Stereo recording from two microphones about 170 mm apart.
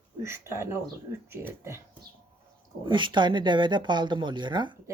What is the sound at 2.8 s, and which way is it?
Speech, 30° right (ahead or behind).